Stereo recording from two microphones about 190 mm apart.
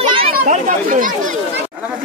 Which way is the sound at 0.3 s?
45° right (ahead or behind).